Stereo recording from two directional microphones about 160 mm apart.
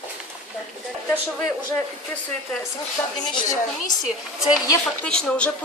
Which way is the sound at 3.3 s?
30° left (ahead or behind).